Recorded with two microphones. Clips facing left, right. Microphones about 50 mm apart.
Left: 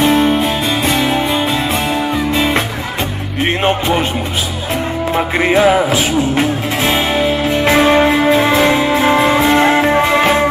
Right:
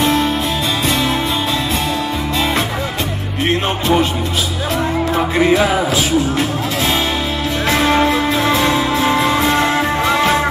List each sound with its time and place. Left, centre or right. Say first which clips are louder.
0.0 s music: left 4 dB; left
5.1 s music: left 1 dB; left